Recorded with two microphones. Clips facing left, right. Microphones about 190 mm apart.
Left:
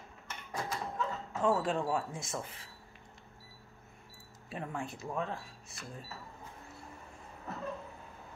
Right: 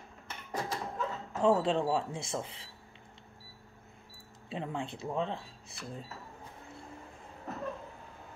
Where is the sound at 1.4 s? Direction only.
25° right (ahead or behind).